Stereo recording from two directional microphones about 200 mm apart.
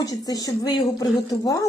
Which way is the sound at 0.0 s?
20° left (ahead or behind).